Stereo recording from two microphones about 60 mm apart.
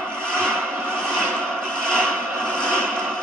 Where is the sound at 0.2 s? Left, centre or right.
Centre.